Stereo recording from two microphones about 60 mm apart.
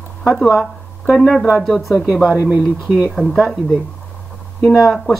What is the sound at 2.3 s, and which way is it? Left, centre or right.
Speech, right.